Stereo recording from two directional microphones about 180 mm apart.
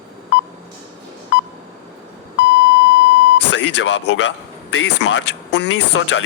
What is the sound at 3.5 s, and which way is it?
Speech, 85° left.